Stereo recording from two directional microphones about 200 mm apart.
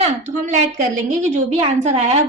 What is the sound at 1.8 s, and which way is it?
Speech, 35° right (ahead or behind).